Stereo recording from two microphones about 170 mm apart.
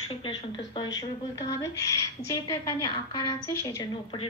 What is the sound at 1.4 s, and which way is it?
A woman's voice, 20° left (ahead or behind).